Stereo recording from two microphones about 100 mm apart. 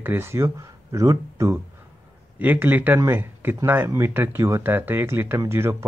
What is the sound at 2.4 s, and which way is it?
Speech, 15° right (ahead or behind).